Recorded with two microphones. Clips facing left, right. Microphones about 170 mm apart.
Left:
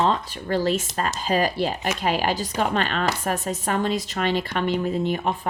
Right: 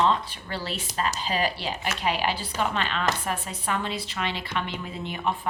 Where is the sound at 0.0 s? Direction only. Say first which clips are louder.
Left 1 dB; 40° left (ahead or behind).